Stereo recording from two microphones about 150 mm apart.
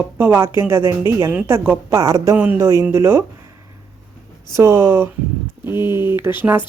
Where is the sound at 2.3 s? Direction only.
10° right (ahead or behind).